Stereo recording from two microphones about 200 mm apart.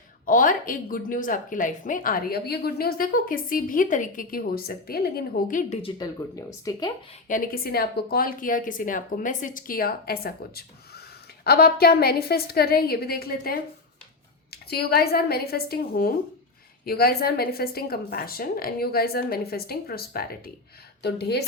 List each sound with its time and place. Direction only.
0.3 s a woman's voice: 40° left (ahead or behind)
5.8 s speech: 20° left (ahead or behind)
7.3 s a woman's voice: 45° left (ahead or behind)